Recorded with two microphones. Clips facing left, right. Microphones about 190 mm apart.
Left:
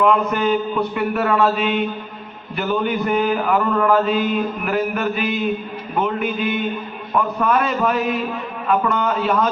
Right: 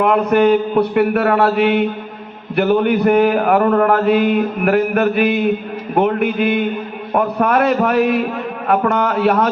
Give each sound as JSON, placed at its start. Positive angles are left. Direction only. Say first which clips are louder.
{"t": 0.0, "sound": "mantra", "louder": "right 5 dB", "side_deg": -65}